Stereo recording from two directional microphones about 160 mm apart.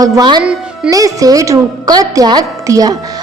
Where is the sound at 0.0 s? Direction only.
25° right (ahead or behind).